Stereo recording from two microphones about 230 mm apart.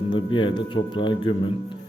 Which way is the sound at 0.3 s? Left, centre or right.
Left.